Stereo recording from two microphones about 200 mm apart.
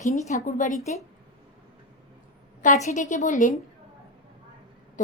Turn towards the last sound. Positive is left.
turn(degrees=40)  # may be behind; listen again after turning